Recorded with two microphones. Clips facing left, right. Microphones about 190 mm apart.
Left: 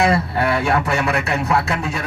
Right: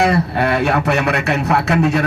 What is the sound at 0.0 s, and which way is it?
A man's voice, 70° right (ahead or behind).